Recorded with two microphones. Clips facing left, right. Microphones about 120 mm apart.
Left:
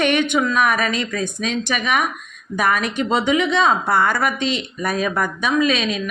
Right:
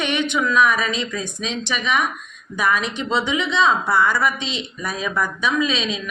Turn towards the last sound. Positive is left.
turn(degrees=55)  # may be behind; listen again after turning